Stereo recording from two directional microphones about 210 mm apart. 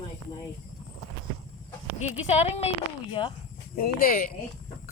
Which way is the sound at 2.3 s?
30° left (ahead or behind).